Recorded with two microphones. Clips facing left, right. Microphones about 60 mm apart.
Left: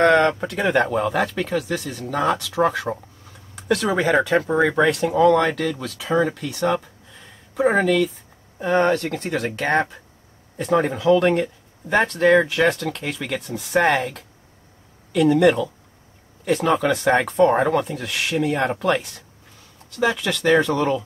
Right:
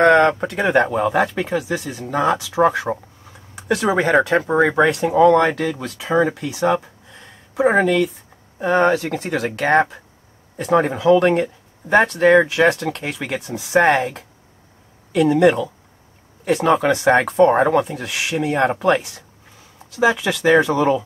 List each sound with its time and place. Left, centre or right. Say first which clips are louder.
0.0 s speech: right 3 dB; centre
4.8 s speech: right 3 dB; centre